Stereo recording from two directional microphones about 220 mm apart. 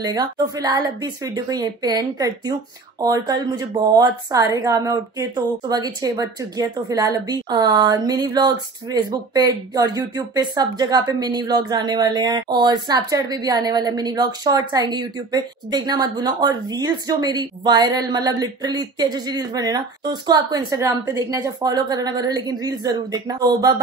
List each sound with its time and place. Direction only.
0.0 s a woman's voice: 20° right (ahead or behind)